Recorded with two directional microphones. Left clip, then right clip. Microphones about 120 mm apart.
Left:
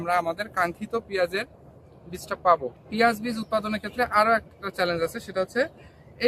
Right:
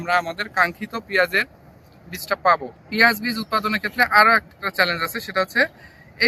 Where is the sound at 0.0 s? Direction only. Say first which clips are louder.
Right 3 dB; 70° left (ahead or behind); by 0.7 s 55° left (ahead or behind).